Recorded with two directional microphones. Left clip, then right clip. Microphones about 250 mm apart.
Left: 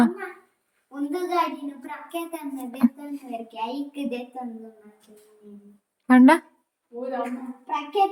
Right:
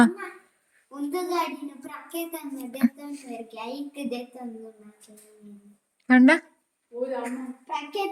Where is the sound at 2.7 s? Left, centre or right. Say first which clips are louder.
Left 2 dB; centre.